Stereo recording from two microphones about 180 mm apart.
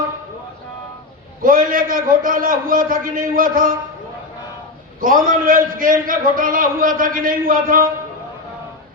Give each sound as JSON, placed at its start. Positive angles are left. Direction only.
{"t": 1.4, "sound": "a man's voice", "side_deg": -50}
{"t": 4.9, "sound": "a man's voice", "side_deg": -50}